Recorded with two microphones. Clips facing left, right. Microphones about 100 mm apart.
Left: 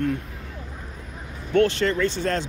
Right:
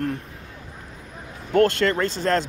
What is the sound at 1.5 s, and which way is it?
Speech, 45° right (ahead or behind).